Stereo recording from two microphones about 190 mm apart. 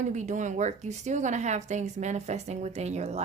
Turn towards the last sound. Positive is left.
turn(degrees=-35)  # may be behind; listen again after turning